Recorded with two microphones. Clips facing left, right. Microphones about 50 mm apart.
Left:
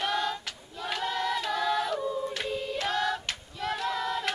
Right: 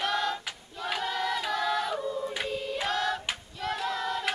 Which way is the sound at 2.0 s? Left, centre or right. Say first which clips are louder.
Left 1 dB; centre.